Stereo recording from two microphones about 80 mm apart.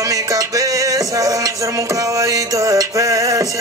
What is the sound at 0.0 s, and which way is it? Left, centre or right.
Music, right.